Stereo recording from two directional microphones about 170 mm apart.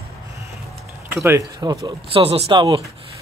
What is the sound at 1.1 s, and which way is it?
Speech, 15° right (ahead or behind).